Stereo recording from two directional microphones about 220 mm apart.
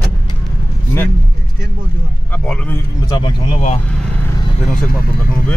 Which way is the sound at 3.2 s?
25° left (ahead or behind).